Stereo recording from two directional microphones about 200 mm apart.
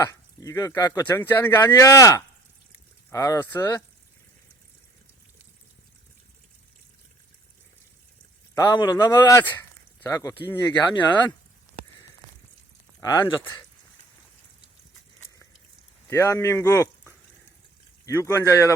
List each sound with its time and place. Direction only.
0.0 s speech: 15° left (ahead or behind)
8.5 s speech: 20° left (ahead or behind)
13.0 s speech: 20° left (ahead or behind)
16.0 s speech: 15° left (ahead or behind)